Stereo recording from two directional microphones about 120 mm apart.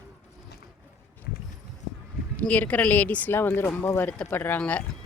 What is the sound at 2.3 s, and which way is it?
Speech, 10° left (ahead or behind).